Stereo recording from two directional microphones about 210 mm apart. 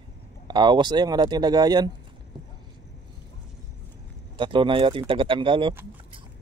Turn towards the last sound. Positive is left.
turn(degrees=-25)  # may be behind; listen again after turning